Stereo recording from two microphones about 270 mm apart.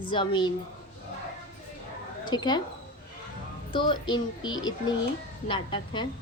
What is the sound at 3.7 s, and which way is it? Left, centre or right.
Speech, centre.